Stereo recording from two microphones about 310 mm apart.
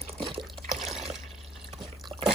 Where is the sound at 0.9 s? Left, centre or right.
Centre.